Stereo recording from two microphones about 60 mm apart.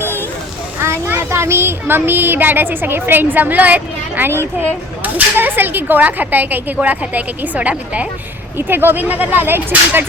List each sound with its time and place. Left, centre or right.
0.0 s a sound: right
0.8 s speech: right
8.5 s speech: right